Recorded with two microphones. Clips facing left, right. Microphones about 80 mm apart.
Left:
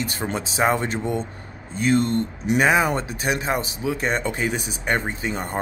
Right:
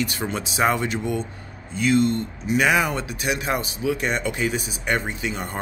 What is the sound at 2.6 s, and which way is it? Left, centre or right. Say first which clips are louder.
Speech: left 2 dB; left.